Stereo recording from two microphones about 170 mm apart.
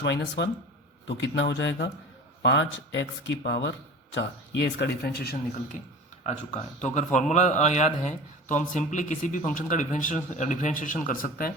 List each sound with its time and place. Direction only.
0.0 s speech: 90° left; by 5.4 s 65° left (ahead or behind)
6.2 s a man's voice: 45° left (ahead or behind)